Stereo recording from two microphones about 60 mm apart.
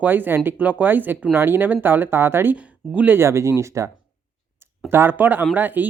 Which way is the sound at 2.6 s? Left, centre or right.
Right.